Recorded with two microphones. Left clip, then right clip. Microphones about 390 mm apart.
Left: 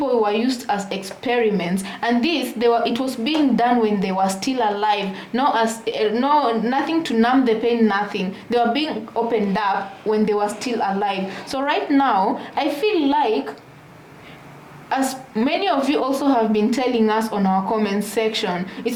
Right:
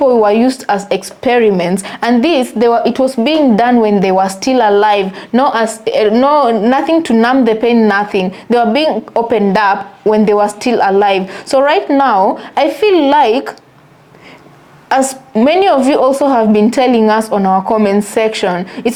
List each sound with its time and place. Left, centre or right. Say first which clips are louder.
0.0 s speech: right 10 dB; right
14.8 s speech: right 10 dB; right